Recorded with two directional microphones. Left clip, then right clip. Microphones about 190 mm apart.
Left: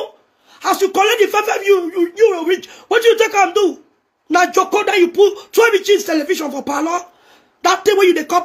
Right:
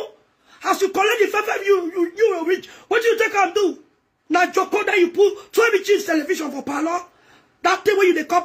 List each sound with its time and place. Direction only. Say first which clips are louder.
0.5 s a man's voice: left 4 dB; 10° right (ahead or behind)